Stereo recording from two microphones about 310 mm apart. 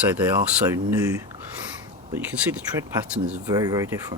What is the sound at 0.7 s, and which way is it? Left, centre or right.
Speech, centre.